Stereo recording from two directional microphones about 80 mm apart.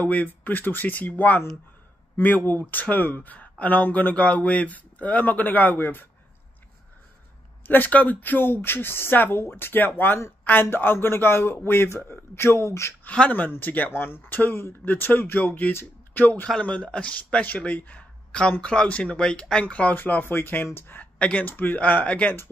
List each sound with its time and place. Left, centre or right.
0.0 s speech: centre
7.6 s speech: left
13.0 s speech: centre
16.4 s speech: centre